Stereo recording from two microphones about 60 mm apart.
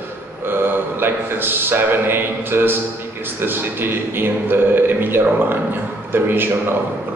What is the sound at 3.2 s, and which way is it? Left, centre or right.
A man's voice, right.